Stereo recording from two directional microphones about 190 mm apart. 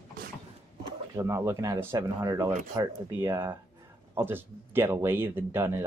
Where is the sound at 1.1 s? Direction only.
15° right (ahead or behind).